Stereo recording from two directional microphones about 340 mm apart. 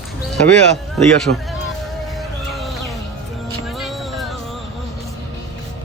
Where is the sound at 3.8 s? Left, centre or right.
Centre.